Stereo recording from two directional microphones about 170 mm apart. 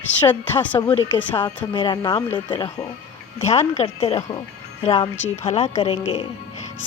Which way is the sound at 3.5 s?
40° left (ahead or behind).